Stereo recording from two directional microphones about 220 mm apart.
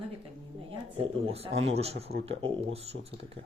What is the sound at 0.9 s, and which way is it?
Speech, 25° right (ahead or behind).